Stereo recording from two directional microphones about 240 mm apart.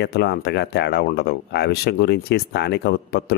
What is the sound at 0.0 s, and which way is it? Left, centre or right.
Speech, left.